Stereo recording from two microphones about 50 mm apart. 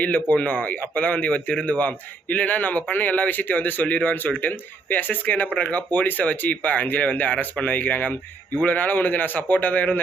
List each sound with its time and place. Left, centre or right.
0.0 s a man's voice: left